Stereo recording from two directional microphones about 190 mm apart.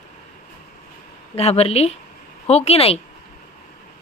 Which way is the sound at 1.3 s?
30° left (ahead or behind).